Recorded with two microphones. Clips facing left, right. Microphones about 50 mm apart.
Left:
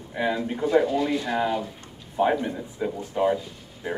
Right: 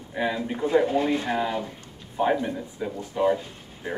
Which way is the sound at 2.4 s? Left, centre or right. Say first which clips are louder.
Left 1 dB; centre.